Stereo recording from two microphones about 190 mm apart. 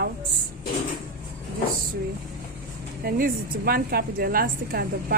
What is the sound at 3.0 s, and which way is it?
A woman's voice, 50° right (ahead or behind).